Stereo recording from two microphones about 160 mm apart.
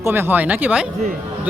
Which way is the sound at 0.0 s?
15° right (ahead or behind).